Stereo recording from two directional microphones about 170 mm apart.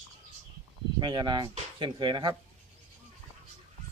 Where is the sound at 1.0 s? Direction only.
25° right (ahead or behind).